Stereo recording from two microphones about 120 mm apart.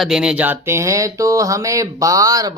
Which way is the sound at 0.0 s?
5° right (ahead or behind).